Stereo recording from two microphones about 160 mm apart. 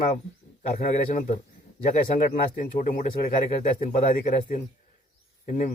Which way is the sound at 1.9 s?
50° left (ahead or behind).